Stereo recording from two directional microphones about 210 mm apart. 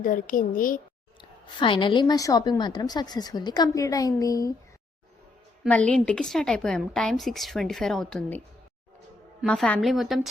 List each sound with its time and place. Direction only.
0.0 s a woman's voice: 40° left (ahead or behind)
1.2 s a woman's voice: 25° left (ahead or behind)
5.6 s a woman's voice: 5° left (ahead or behind)
9.4 s a woman's voice: 5° left (ahead or behind)